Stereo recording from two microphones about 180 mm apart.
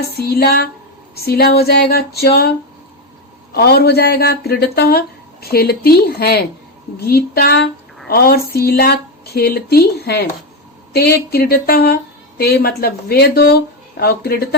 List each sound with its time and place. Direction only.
0.2 s speech: 60° left (ahead or behind)